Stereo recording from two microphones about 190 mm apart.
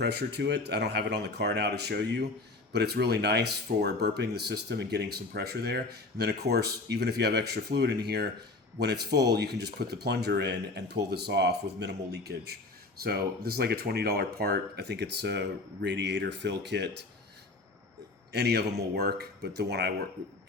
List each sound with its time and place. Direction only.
0.0 s speech: 60° right (ahead or behind)
18.3 s speech: 60° right (ahead or behind)